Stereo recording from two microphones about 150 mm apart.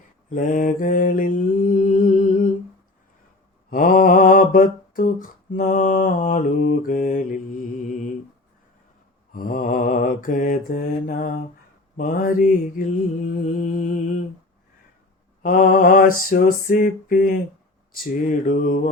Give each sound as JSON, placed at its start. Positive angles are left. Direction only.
{"t": 0.3, "sound": "mantra", "side_deg": 60}
{"t": 3.7, "sound": "mantra", "side_deg": 65}
{"t": 9.3, "sound": "mantra", "side_deg": 65}
{"t": 13.6, "sound": "music", "side_deg": 60}
{"t": 15.4, "sound": "mantra", "side_deg": 65}